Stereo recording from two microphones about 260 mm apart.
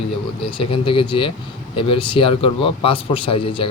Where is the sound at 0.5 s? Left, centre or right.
Centre.